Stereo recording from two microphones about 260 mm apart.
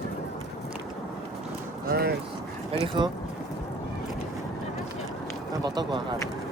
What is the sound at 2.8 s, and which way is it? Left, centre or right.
Speech, centre.